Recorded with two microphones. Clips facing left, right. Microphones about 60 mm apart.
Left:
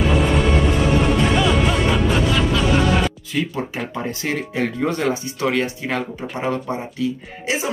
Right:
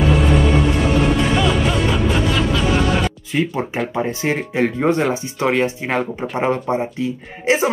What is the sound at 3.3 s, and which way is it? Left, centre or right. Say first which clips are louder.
Speech: right 3 dB; right.